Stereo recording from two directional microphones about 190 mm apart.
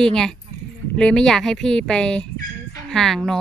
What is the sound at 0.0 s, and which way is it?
Speech, 5° left (ahead or behind).